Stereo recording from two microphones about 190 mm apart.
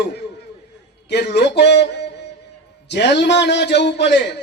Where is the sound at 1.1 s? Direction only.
60° left (ahead or behind).